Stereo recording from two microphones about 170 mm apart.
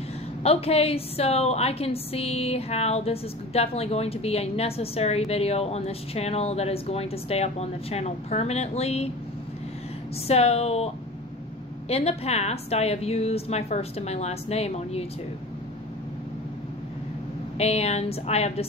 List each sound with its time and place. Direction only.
0.4 s a woman's voice: 35° left (ahead or behind)
10.2 s a woman's voice: 35° left (ahead or behind)
11.9 s a woman's voice: 35° left (ahead or behind)
17.6 s a woman's voice: 40° left (ahead or behind)